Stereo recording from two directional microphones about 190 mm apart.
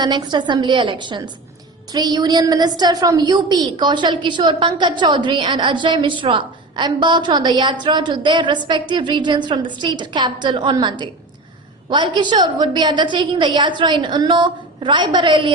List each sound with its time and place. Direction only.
0.0 s a woman's voice: 25° right (ahead or behind)